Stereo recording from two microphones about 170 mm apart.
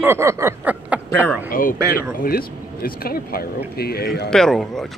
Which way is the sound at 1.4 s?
55° left (ahead or behind).